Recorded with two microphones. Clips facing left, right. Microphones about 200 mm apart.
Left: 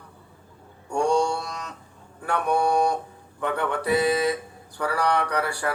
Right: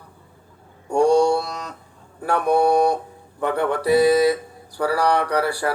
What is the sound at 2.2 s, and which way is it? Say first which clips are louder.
Speech: right 5 dB; 35° right (ahead or behind).